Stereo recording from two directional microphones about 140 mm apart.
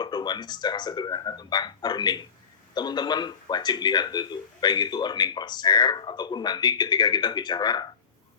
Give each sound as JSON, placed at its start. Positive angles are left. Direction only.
{"t": 0.0, "sound": "speech", "side_deg": 30}